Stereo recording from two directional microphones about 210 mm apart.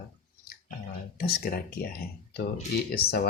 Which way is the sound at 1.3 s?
45° left (ahead or behind).